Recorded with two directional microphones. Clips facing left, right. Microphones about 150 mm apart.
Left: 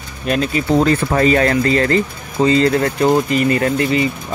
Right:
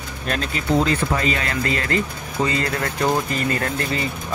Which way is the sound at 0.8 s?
50° left (ahead or behind).